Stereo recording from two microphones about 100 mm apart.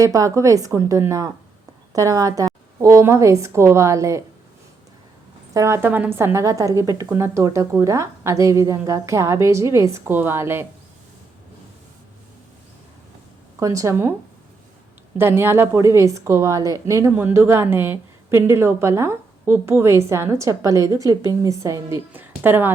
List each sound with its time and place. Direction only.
0.0 s a woman's voice: 35° right (ahead or behind)
5.5 s a woman's voice: 30° right (ahead or behind)
13.6 s a woman's voice: 30° right (ahead or behind)
15.2 s a woman's voice: 25° right (ahead or behind)
22.1 s a woman's voice: 20° right (ahead or behind)